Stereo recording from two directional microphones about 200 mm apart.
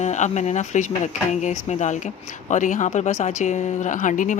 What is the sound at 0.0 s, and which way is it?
Speech, 35° left (ahead or behind).